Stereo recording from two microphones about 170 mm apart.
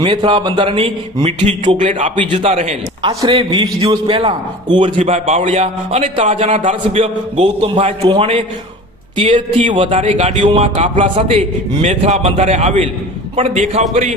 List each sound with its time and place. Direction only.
0.0 s a man's voice: 30° right (ahead or behind)
3.0 s a man's voice: 25° right (ahead or behind)
10.0 s speech: 40° right (ahead or behind)
10.3 s a man's voice: 30° right (ahead or behind)